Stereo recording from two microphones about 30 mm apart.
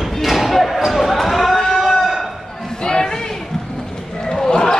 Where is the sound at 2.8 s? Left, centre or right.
Left.